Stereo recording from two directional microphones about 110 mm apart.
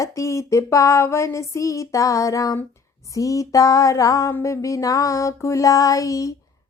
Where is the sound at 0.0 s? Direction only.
30° left (ahead or behind).